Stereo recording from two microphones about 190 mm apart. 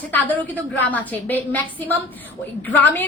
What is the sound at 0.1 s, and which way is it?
A woman's voice, 10° left (ahead or behind).